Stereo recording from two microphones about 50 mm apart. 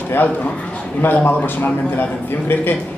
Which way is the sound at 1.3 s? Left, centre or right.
Left.